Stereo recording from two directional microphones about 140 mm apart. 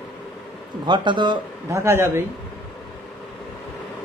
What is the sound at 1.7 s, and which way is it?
Speech, 20° right (ahead or behind).